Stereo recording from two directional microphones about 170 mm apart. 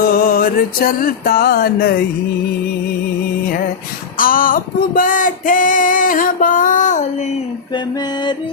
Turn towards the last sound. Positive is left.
turn(degrees=45)  # may be behind; listen again after turning